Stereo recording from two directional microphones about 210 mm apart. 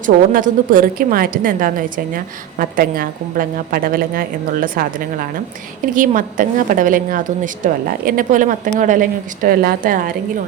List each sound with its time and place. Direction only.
0.0 s a woman's voice: 40° right (ahead or behind)